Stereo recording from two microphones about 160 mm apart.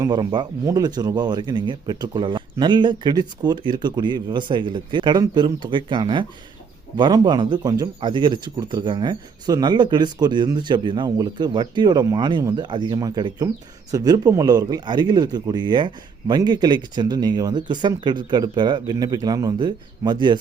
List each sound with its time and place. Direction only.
0.0 s speech: 25° right (ahead or behind)